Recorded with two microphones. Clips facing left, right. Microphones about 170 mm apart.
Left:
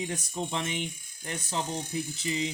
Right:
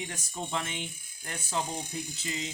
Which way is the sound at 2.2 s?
20° left (ahead or behind).